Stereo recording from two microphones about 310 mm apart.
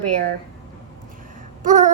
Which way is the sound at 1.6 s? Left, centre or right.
Right.